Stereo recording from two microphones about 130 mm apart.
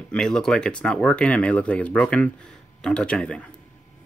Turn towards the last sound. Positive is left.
turn(degrees=10)  # may be behind; listen again after turning